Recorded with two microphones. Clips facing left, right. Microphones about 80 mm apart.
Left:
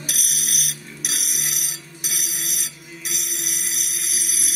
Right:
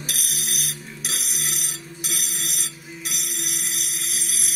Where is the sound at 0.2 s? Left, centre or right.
Right.